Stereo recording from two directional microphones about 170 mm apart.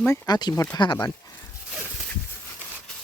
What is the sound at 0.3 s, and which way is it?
Speech, 25° left (ahead or behind).